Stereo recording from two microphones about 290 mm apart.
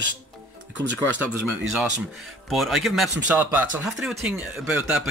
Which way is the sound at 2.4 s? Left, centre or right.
Centre.